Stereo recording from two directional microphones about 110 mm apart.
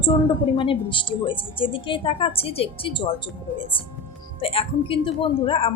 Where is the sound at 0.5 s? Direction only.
50° left (ahead or behind).